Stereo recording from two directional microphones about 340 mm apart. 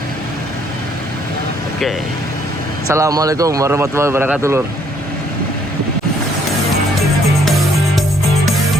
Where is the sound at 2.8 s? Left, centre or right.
Centre.